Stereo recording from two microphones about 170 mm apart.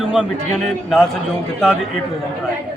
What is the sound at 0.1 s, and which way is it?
Speech, 5° left (ahead or behind).